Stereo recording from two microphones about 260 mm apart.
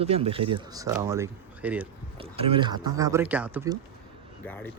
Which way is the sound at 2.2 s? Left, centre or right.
Right.